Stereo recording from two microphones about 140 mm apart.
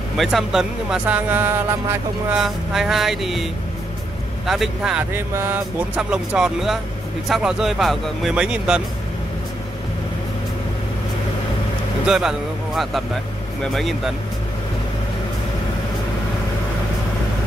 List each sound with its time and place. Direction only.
0.2 s speech: centre (ahead or behind)
2.3 s speech: centre (ahead or behind)
4.5 s speech: 5° right (ahead or behind)
5.1 s speech: 15° right (ahead or behind)
5.9 s speech: 5° right (ahead or behind)
12.1 s a man's voice: 5° right (ahead or behind)